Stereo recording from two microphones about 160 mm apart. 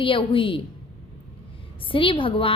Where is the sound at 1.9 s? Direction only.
35° left (ahead or behind).